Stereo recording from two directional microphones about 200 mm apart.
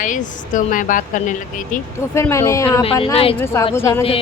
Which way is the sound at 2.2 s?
15° left (ahead or behind).